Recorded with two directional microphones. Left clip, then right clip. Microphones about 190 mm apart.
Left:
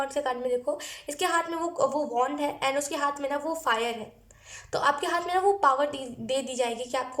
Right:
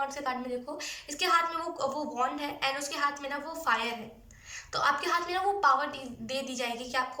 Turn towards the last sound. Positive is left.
turn(degrees=35)  # may be behind; listen again after turning